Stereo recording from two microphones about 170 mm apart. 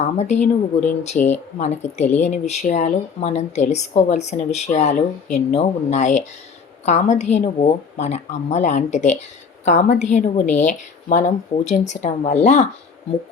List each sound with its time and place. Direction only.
0.0 s speech: 40° left (ahead or behind)